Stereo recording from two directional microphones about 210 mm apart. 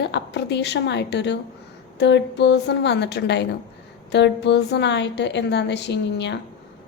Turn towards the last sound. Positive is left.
turn(degrees=55)  # may be behind; listen again after turning